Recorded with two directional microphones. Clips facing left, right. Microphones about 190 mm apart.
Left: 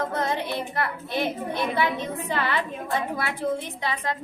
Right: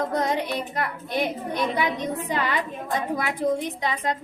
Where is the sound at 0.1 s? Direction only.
15° right (ahead or behind).